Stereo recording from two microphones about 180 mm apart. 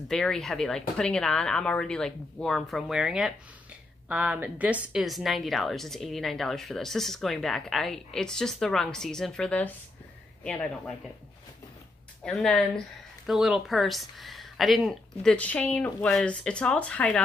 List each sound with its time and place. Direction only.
0.1 s a woman's voice: 5° left (ahead or behind)
12.3 s a woman's voice: centre (ahead or behind)